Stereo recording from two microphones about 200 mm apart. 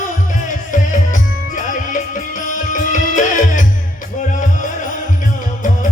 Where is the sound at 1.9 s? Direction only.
40° left (ahead or behind).